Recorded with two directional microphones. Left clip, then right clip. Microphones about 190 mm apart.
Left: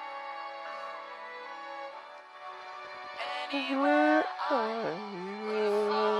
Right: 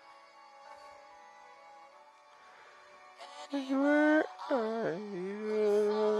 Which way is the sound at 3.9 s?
15° right (ahead or behind).